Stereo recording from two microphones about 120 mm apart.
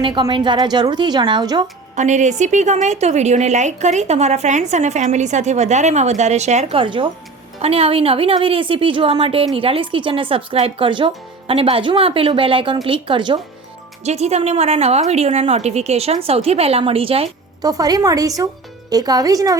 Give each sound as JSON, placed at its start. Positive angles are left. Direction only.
{"t": 0.0, "sound": "a woman's voice", "side_deg": -40}
{"t": 2.0, "sound": "a woman's voice", "side_deg": -90}
{"t": 6.7, "sound": "speech", "side_deg": -45}
{"t": 7.6, "sound": "speech", "side_deg": -55}
{"t": 14.0, "sound": "a woman's voice", "side_deg": -65}
{"t": 17.6, "sound": "a woman's voice", "side_deg": -30}